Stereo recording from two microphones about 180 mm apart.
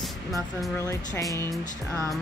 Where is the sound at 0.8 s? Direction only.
15° left (ahead or behind).